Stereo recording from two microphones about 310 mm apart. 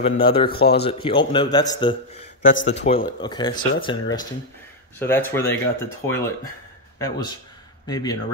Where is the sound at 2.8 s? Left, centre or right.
Centre.